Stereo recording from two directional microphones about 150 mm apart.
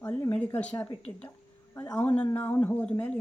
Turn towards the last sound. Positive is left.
turn(degrees=10)  # may be behind; listen again after turning